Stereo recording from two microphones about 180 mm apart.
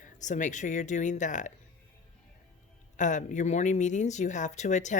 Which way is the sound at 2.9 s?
45° left (ahead or behind).